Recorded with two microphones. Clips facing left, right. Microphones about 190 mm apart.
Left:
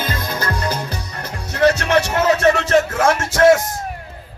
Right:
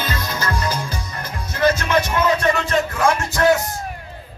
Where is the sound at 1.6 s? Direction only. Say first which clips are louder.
Left 3 dB; 70° left (ahead or behind).